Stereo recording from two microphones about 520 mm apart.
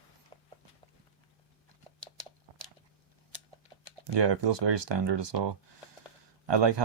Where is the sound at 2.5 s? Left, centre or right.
Right.